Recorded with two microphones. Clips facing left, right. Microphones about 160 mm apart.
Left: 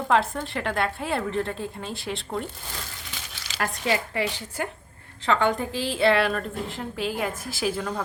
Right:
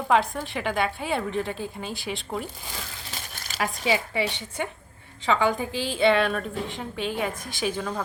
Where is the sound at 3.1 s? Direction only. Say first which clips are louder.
Right 2 dB; 50° right (ahead or behind).